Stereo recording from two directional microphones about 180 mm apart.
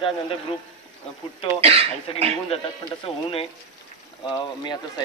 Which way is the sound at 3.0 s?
30° left (ahead or behind).